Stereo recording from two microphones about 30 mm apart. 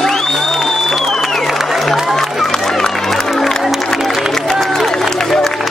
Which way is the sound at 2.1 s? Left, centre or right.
Centre.